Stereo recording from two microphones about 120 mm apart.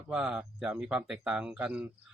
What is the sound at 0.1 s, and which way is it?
Speech, 5° right (ahead or behind).